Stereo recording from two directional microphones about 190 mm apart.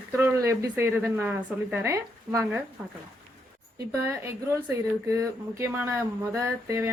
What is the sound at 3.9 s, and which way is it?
A woman's voice, 15° right (ahead or behind).